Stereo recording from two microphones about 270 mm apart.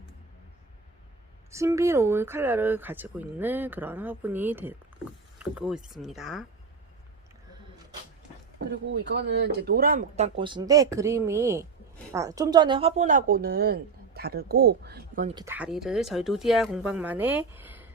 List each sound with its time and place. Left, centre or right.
1.5 s speech: centre
8.7 s a woman's voice: right
15.4 s speech: centre